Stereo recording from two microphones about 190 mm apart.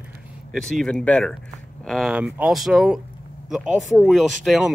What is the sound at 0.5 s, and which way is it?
Speech, centre (ahead or behind).